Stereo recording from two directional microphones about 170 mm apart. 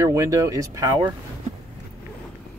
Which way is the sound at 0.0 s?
20° right (ahead or behind).